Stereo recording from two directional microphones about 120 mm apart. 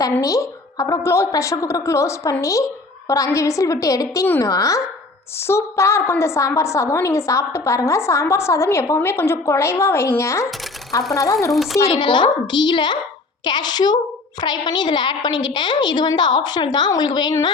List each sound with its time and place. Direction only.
0.2 s a woman's voice: 30° left (ahead or behind)
11.5 s speech: centre (ahead or behind)
11.9 s a woman's voice: 40° left (ahead or behind)